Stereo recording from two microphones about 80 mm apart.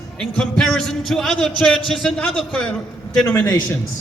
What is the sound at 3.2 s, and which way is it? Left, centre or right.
Speech, left.